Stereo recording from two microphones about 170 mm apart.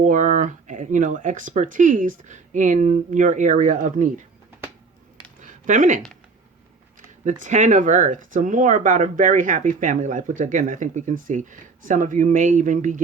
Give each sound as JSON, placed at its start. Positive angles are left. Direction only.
{"t": 0.0, "sound": "speech", "side_deg": -45}
{"t": 5.4, "sound": "a sound", "side_deg": -50}
{"t": 7.3, "sound": "speech", "side_deg": -45}